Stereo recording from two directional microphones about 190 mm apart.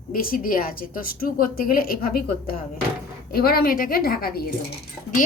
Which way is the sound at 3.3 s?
50° left (ahead or behind).